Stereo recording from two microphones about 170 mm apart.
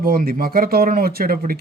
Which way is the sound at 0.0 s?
60° right (ahead or behind).